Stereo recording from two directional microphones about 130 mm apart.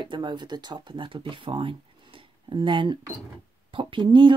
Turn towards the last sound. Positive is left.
turn(degrees=-35)  # may be behind; listen again after turning